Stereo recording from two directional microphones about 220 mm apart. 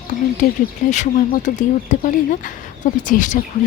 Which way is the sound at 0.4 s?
40° left (ahead or behind).